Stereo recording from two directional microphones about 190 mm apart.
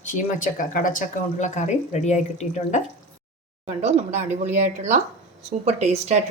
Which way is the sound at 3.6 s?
35° right (ahead or behind).